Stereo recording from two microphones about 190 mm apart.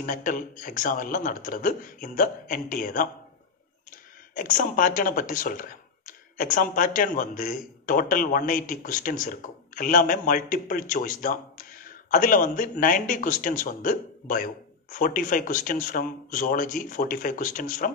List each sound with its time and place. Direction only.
0.0 s speech: 45° left (ahead or behind)
4.4 s speech: 45° left (ahead or behind)